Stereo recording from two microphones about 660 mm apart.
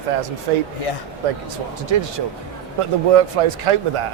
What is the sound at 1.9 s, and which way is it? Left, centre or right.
Speech, right.